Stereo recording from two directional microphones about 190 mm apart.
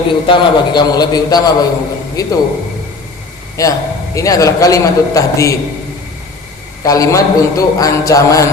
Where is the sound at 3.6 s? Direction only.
15° left (ahead or behind).